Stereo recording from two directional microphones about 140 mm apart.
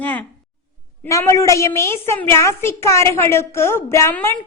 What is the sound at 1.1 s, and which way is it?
A woman's voice, 20° left (ahead or behind).